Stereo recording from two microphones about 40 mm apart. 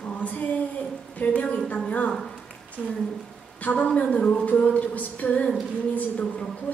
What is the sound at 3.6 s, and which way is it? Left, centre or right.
A man's voice, left.